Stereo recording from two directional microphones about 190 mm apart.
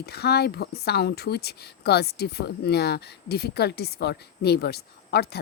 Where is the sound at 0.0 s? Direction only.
60° left (ahead or behind).